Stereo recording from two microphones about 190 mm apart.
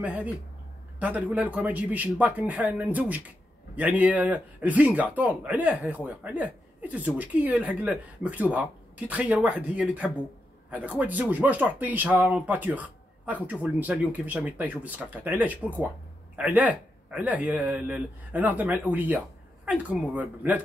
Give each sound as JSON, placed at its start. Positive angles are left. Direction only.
{"t": 0.0, "sound": "speech", "side_deg": -10}